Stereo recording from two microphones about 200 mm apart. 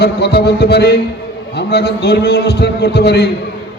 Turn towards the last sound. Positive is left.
turn(degrees=55)  # may be behind; listen again after turning